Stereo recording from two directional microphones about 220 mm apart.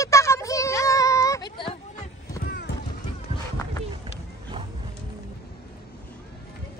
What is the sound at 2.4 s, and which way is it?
Music, 45° left (ahead or behind).